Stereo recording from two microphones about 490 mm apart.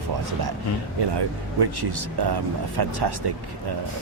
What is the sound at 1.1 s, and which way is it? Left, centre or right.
Speech, right.